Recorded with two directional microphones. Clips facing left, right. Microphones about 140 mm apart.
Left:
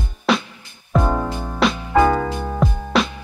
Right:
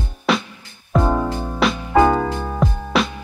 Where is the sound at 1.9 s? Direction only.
15° right (ahead or behind).